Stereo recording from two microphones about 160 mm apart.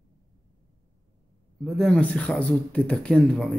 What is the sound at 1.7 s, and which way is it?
Speech, 5° left (ahead or behind).